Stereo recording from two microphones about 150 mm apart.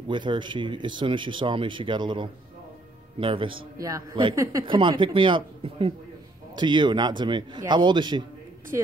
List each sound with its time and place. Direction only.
0.1 s speech: 30° right (ahead or behind)
3.8 s a man's voice: 20° right (ahead or behind)
4.7 s a man's voice: 35° right (ahead or behind)
8.7 s a woman's voice: 20° right (ahead or behind)